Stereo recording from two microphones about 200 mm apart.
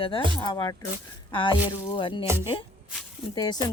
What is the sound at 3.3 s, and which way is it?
Speech, 20° left (ahead or behind).